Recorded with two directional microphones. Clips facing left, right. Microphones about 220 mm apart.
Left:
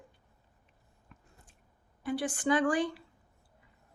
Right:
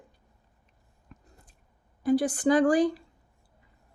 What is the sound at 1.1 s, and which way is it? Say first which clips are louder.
Biting: right 6 dB; 35° right (ahead or behind).